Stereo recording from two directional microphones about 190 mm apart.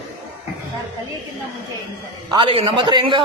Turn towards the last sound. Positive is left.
turn(degrees=-25)  # may be behind; listen again after turning